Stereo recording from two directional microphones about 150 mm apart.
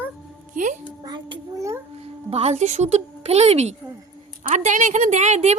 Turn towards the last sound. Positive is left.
turn(degrees=-50)  # may be behind; listen again after turning